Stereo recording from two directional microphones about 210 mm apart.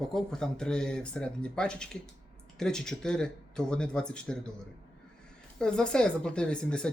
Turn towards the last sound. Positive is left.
turn(degrees=5)  # may be behind; listen again after turning